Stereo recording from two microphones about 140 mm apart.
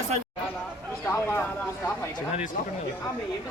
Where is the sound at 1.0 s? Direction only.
15° left (ahead or behind).